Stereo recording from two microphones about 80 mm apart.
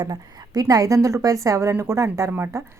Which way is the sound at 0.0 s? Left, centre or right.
Right.